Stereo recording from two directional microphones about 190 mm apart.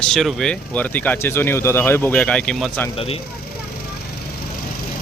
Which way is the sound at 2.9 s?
30° left (ahead or behind).